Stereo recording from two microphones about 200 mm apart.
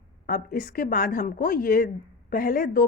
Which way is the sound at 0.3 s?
45° left (ahead or behind).